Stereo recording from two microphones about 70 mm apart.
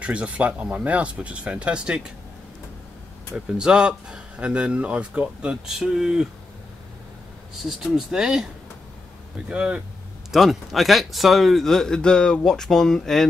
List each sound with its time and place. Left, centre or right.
0.0 s speech: centre
3.3 s speech: centre
7.6 s speech: centre
9.5 s speech: centre
10.3 s speech: centre